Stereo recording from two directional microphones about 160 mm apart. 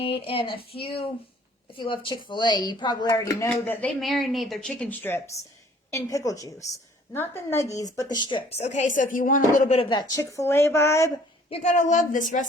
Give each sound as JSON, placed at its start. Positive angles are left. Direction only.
{"t": 0.0, "sound": "speech", "side_deg": 35}
{"t": 3.5, "sound": "speech", "side_deg": 10}
{"t": 9.7, "sound": "speech", "side_deg": 30}
{"t": 11.4, "sound": "a woman's voice", "side_deg": 45}